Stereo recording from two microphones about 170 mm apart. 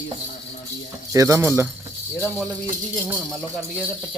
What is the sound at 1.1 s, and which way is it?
Speech, 15° right (ahead or behind).